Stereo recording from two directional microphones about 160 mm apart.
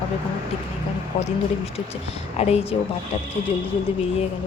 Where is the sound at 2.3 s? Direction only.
40° left (ahead or behind).